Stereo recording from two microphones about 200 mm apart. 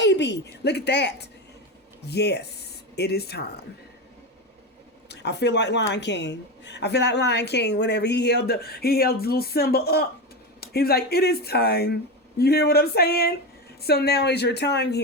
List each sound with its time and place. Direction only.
0.0 s a woman's voice: 60° left (ahead or behind)
5.0 s a woman's voice: 60° left (ahead or behind)